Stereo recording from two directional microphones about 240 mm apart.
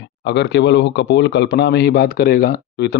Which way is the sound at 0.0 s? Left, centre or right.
Left.